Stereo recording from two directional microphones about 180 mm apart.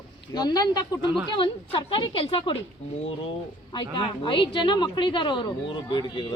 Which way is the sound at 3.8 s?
25° left (ahead or behind).